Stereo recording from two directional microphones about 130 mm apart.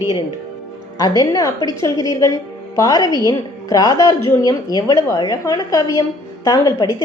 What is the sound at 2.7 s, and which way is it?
Speech, 25° left (ahead or behind).